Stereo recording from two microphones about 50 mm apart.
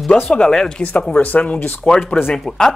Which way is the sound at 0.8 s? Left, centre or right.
Left.